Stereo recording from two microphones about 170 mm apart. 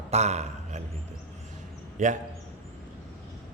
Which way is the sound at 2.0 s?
45° right (ahead or behind).